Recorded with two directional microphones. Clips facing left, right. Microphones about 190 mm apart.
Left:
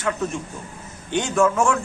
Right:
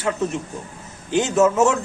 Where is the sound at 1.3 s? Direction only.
25° right (ahead or behind).